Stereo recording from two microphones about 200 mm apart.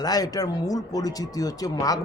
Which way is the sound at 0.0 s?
20° left (ahead or behind).